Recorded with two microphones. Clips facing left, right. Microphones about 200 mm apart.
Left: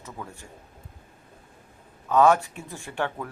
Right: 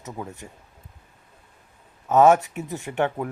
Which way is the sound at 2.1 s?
20° right (ahead or behind).